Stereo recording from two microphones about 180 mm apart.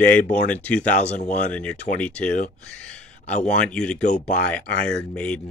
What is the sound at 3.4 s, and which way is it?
Speech, 5° left (ahead or behind).